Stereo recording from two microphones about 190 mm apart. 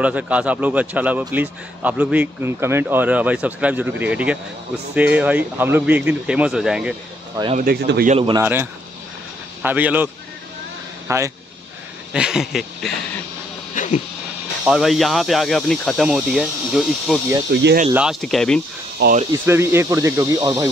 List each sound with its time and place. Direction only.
0.0 s a man's voice: 5° right (ahead or behind)
7.5 s speech: 55° right (ahead or behind)
8.1 s a man's voice: 30° right (ahead or behind)
8.4 s a man's voice: 10° right (ahead or behind)
11.1 s speech: 15° right (ahead or behind)
12.1 s speech: 5° right (ahead or behind)
13.7 s a sound: 40° left (ahead or behind)
14.6 s speech: 5° right (ahead or behind)
17.5 s speech: 60° right (ahead or behind)
17.9 s speech: centre (ahead or behind)
19.0 s speech: 60° right (ahead or behind)
19.3 s a man's voice: 15° right (ahead or behind)